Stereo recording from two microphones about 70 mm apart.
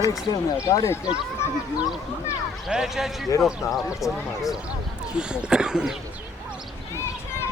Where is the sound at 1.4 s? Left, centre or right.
Left.